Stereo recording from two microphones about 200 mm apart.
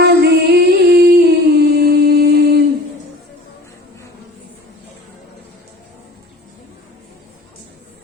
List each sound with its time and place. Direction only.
0.0 s music: 55° right (ahead or behind)